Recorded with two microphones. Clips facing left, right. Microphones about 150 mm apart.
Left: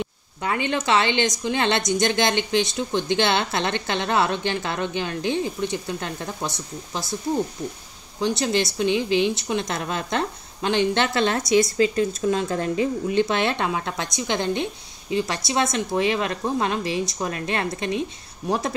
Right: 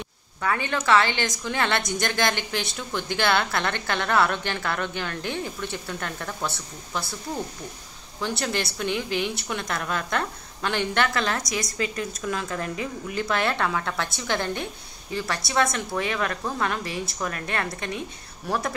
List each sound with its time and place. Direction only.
0.4 s a woman's voice: 20° left (ahead or behind)
8.2 s a woman's voice: 20° left (ahead or behind)